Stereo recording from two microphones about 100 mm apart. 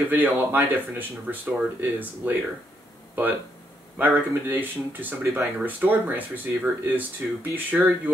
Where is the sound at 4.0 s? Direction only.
20° right (ahead or behind).